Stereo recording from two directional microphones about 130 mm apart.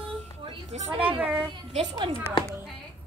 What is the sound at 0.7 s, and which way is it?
Speech, 55° right (ahead or behind).